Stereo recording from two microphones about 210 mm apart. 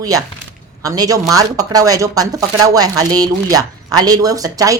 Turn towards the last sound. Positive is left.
turn(degrees=-15)  # may be behind; listen again after turning